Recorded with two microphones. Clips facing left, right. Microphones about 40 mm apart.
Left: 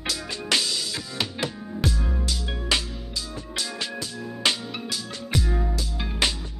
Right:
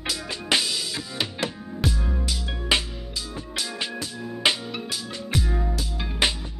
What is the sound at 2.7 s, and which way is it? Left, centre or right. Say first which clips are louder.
Music: right 2 dB; centre.